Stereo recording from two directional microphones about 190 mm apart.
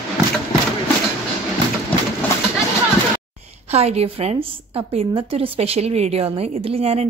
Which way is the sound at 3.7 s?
35° right (ahead or behind).